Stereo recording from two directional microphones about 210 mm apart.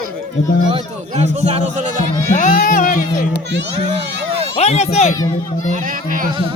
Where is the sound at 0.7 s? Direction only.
30° right (ahead or behind).